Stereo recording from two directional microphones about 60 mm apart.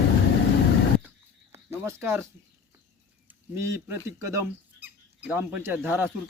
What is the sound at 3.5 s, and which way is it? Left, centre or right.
Speech, right.